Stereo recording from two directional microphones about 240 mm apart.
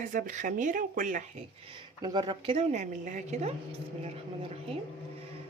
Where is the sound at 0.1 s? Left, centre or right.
Right.